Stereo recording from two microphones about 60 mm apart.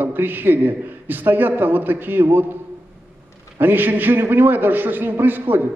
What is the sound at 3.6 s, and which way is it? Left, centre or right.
A man's voice, right.